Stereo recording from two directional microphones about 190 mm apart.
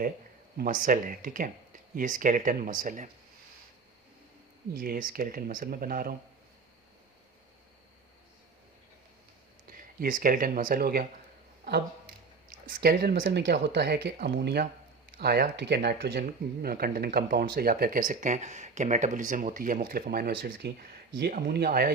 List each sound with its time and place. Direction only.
0.5 s speech: 50° right (ahead or behind)
4.7 s speech: 50° right (ahead or behind)
9.7 s speech: 45° right (ahead or behind)
11.6 s a sound: 55° right (ahead or behind)
13.1 s speech: 70° right (ahead or behind); by 21.9 s 55° right (ahead or behind)